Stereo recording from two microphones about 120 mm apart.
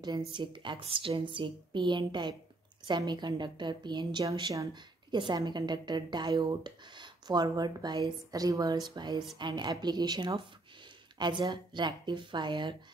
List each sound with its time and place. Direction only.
0.3 s speech: 40° right (ahead or behind)